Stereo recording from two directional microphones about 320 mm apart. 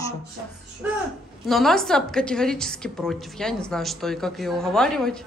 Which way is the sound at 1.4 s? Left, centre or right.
Centre.